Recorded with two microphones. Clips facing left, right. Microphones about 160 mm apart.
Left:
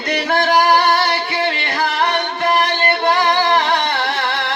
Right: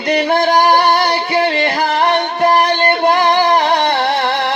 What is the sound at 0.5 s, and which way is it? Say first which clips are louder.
Music: even; 40° right (ahead or behind).